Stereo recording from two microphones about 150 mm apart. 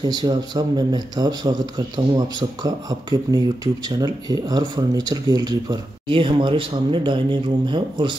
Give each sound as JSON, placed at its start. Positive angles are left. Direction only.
{"t": 0.0, "sound": "speech", "side_deg": -30}